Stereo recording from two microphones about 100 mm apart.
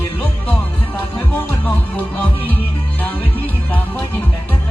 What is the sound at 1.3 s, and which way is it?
Music, 15° left (ahead or behind).